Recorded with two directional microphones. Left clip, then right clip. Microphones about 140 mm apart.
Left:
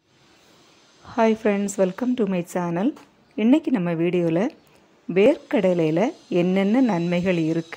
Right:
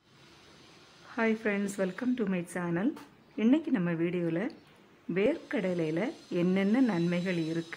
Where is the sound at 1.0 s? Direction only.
35° left (ahead or behind).